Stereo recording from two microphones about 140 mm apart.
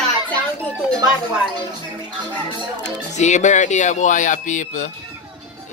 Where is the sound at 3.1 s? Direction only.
55° left (ahead or behind).